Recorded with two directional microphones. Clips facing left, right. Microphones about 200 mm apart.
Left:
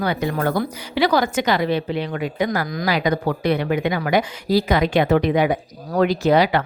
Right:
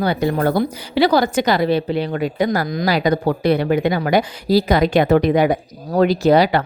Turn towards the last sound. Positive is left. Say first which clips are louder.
# right 3 dB
turn(degrees=-35)  # may be behind; listen again after turning